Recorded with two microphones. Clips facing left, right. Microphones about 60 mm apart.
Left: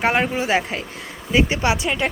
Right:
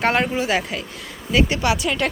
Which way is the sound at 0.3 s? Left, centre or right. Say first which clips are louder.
Left 1 dB; left.